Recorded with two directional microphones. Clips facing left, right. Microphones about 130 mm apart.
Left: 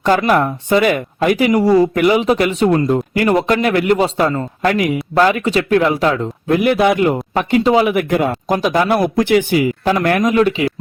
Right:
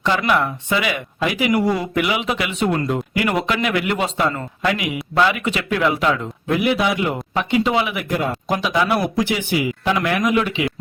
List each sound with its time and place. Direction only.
0.3 s speech: 40° left (ahead or behind)
8.1 s speech: 70° left (ahead or behind)
8.4 s speech: 45° left (ahead or behind)